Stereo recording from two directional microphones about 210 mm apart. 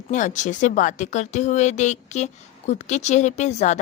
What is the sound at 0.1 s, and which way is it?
Speech, 35° left (ahead or behind).